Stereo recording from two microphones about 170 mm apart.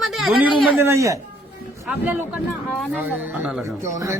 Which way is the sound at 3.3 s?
5° right (ahead or behind).